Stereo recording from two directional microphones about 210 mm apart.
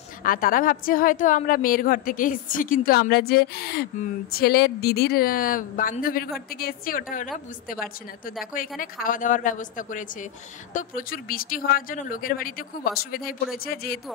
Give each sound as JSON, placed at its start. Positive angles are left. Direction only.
{"t": 0.2, "sound": "a woman's voice", "side_deg": 40}
{"t": 8.6, "sound": "a woman's voice", "side_deg": 40}